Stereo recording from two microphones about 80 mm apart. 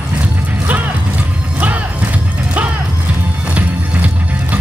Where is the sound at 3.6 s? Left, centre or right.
Centre.